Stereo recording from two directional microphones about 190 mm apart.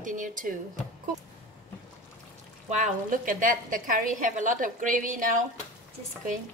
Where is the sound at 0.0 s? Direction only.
45° right (ahead or behind).